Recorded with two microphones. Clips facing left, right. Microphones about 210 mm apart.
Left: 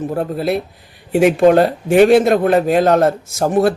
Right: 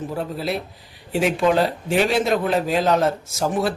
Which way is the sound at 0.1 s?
55° left (ahead or behind).